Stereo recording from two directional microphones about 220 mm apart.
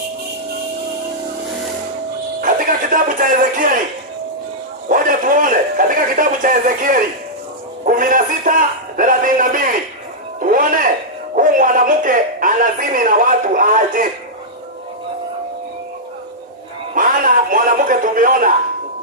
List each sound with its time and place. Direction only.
2.4 s speech: 40° right (ahead or behind)
4.9 s a man's voice: 40° right (ahead or behind)
10.4 s a sound: 40° right (ahead or behind)
11.3 s a man's voice: 40° right (ahead or behind)
16.9 s a man's voice: 35° right (ahead or behind)